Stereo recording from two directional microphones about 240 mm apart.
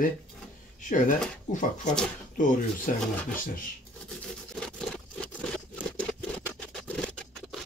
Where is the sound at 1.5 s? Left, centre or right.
Left.